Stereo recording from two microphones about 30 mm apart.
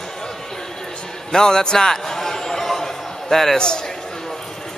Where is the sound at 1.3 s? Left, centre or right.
Left.